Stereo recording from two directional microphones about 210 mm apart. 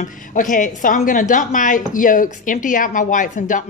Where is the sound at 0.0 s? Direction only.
40° left (ahead or behind).